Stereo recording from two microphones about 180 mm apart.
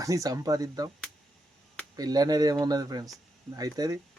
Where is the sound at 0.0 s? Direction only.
20° right (ahead or behind).